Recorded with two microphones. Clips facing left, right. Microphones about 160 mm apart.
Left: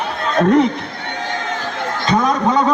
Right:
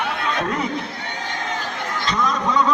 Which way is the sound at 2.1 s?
55° left (ahead or behind).